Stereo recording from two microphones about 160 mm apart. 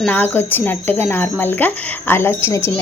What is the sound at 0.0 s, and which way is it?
Speech, 10° left (ahead or behind).